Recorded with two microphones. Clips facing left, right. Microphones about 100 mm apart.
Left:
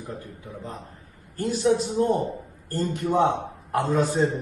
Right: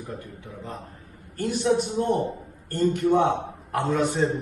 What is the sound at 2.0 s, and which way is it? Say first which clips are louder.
A man's voice: left 1 dB; 30° left (ahead or behind).